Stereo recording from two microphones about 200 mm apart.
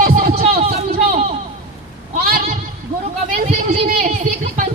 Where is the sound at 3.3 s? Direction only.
40° right (ahead or behind).